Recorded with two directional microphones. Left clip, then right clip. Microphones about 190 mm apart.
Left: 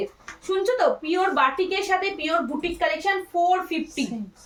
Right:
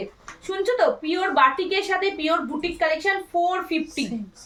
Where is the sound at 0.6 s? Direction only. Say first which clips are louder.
Right 2 dB; 20° right (ahead or behind).